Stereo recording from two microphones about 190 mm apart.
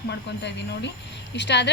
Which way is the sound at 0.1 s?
65° left (ahead or behind).